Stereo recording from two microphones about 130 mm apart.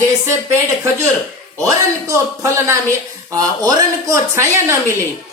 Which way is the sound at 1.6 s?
25° right (ahead or behind).